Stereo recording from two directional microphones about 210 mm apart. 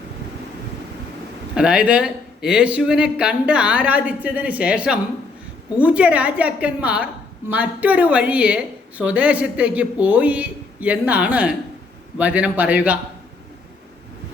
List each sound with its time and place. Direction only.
1.5 s a woman's voice: 5° right (ahead or behind)